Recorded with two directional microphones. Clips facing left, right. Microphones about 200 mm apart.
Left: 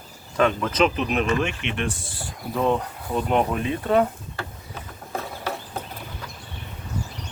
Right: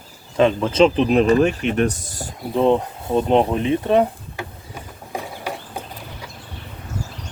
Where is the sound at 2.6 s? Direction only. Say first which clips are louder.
Right 6 dB; 25° right (ahead or behind).